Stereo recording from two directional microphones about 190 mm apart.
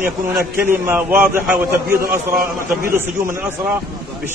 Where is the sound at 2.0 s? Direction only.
50° right (ahead or behind).